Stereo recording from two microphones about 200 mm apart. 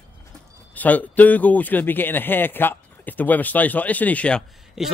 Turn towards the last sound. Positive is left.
turn(degrees=0)  # may be behind; listen again after turning